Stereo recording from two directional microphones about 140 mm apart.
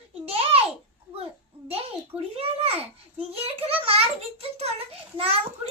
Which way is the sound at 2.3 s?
45° right (ahead or behind).